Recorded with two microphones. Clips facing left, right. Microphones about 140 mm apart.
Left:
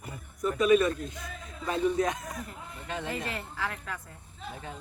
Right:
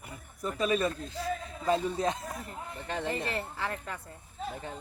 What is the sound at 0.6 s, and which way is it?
A man's voice, 30° right (ahead or behind).